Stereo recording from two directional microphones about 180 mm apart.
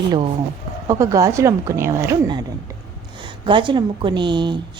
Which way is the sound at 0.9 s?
20° right (ahead or behind).